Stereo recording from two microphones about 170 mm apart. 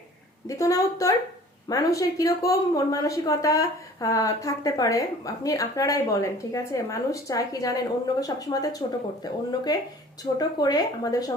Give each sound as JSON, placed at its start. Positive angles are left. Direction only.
{"t": 0.4, "sound": "speech", "side_deg": 20}